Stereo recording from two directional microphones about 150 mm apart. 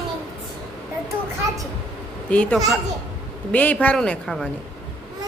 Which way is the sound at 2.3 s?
10° left (ahead or behind).